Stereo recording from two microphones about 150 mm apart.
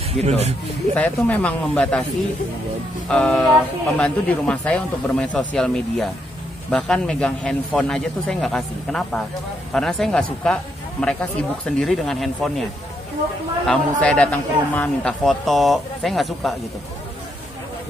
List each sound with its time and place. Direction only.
0.2 s speech: 45° right (ahead or behind)
0.9 s speech: 10° left (ahead or behind)
3.1 s speech: 5° left (ahead or behind)
13.7 s speech: 5° left (ahead or behind)